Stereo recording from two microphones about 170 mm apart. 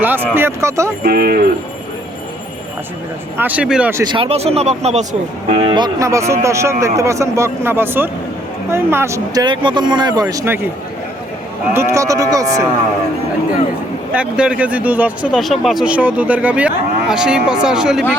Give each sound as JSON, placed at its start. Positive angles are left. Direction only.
{"t": 0.0, "sound": "speech", "side_deg": -10}
{"t": 1.0, "sound": "speech", "side_deg": -65}
{"t": 3.3, "sound": "speech", "side_deg": -10}
{"t": 4.1, "sound": "speech", "side_deg": -35}
{"t": 11.7, "sound": "speech", "side_deg": -15}
{"t": 14.1, "sound": "speech", "side_deg": -5}